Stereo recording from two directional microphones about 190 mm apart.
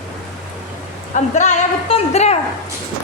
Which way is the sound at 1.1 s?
40° left (ahead or behind).